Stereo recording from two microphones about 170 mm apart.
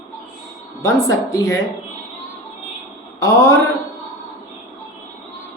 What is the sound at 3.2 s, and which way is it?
Speech, 20° left (ahead or behind).